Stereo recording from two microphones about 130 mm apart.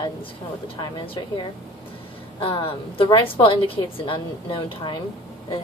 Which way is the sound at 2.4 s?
45° left (ahead or behind).